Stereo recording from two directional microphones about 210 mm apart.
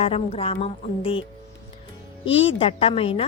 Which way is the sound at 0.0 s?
30° left (ahead or behind).